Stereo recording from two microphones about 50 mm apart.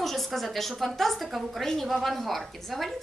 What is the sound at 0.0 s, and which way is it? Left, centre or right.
A woman's voice, centre.